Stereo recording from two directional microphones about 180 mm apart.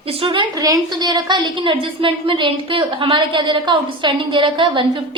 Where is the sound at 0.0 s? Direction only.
30° right (ahead or behind).